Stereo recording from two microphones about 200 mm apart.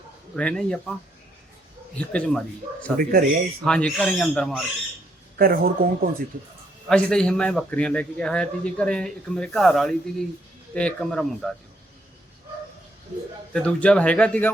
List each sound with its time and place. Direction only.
0.3 s a man's voice: 5° left (ahead or behind)
2.0 s a man's voice: 5° left (ahead or behind)
3.0 s speech: 50° right (ahead or behind)
3.6 s a man's voice: 5° left (ahead or behind)
5.4 s speech: 45° right (ahead or behind)
6.8 s a man's voice: 5° left (ahead or behind)
13.5 s a man's voice: 5° left (ahead or behind)